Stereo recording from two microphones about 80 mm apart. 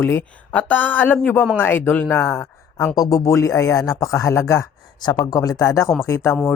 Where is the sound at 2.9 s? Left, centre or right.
Left.